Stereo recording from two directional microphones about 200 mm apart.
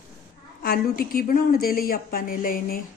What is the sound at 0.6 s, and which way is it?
Speech, 50° left (ahead or behind).